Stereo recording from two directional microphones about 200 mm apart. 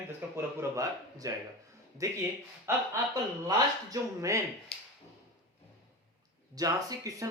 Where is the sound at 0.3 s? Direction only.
15° right (ahead or behind).